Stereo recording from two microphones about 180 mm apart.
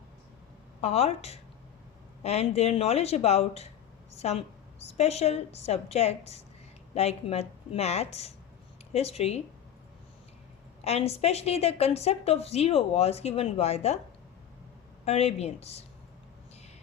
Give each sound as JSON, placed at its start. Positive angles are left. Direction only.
{"t": 0.8, "sound": "a woman's voice", "side_deg": 35}
{"t": 10.8, "sound": "a woman's voice", "side_deg": 35}
{"t": 15.0, "sound": "a woman's voice", "side_deg": 35}